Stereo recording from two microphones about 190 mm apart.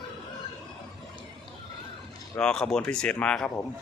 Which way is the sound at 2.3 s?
5° left (ahead or behind).